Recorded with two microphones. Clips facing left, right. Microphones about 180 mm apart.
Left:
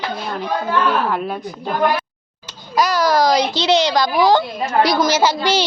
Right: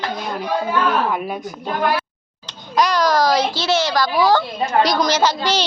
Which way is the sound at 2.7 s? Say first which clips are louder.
Left 1 dB; 5° left (ahead or behind).